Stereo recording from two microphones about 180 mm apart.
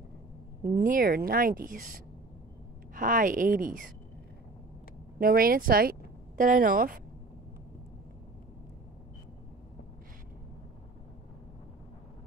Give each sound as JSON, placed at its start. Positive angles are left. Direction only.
{"t": 0.8, "sound": "speech", "side_deg": -55}
{"t": 2.9, "sound": "speech", "side_deg": -50}
{"t": 5.2, "sound": "speech", "side_deg": -55}